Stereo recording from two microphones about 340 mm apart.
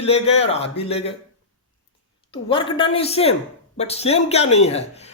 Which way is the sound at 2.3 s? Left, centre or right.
Centre.